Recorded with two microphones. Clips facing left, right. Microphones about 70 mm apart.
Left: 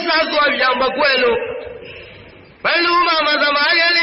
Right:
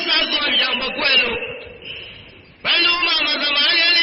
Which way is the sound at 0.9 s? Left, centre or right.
Left.